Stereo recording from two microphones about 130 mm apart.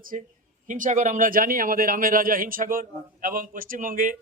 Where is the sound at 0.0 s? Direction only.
90° right.